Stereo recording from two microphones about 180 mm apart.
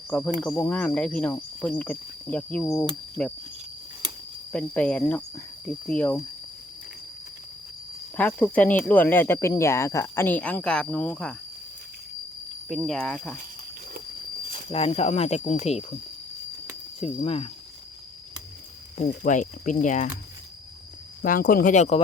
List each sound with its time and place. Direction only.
0.3 s speech: 5° left (ahead or behind)
4.5 s speech: 5° left (ahead or behind)
8.1 s speech: 10° left (ahead or behind)
12.6 s speech: centre (ahead or behind)
14.7 s speech: 35° left (ahead or behind)
17.0 s speech: 35° left (ahead or behind)
18.9 s speech: 45° left (ahead or behind)
21.2 s speech: 50° left (ahead or behind)